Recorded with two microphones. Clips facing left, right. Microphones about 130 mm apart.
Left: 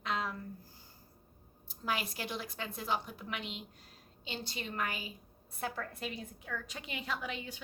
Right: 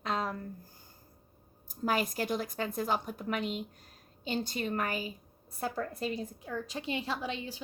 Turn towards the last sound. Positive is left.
turn(degrees=-30)  # may be behind; listen again after turning